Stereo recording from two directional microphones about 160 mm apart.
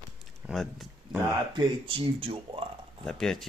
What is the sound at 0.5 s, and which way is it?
Speech, centre (ahead or behind).